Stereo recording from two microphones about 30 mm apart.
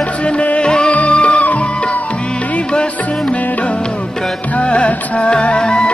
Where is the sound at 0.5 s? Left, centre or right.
Left.